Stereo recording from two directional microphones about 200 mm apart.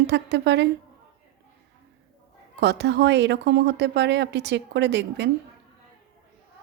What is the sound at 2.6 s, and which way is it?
A woman's voice, 60° right (ahead or behind).